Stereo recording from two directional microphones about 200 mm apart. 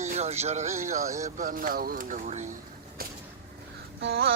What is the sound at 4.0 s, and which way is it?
Babbling, 55° right (ahead or behind).